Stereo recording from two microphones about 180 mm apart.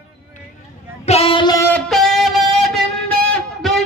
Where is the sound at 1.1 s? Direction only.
30° left (ahead or behind).